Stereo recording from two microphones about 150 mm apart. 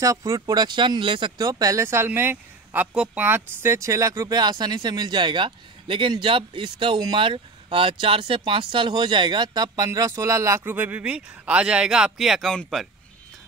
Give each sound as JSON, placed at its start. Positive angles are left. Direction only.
{"t": 0.0, "sound": "speech", "side_deg": -20}